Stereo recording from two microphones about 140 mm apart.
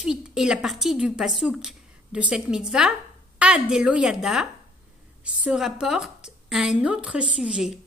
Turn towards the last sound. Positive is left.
turn(degrees=-5)  # may be behind; listen again after turning